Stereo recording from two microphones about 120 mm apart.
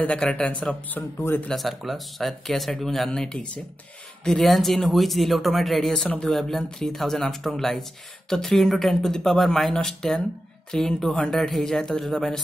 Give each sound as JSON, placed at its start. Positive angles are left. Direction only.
{"t": 0.0, "sound": "speech", "side_deg": 10}
{"t": 1.5, "sound": "speech", "side_deg": 0}